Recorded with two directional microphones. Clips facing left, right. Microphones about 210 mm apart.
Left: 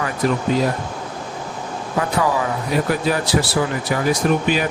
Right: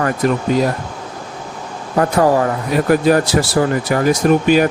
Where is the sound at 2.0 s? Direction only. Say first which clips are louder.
Right 7 dB; 50° right (ahead or behind).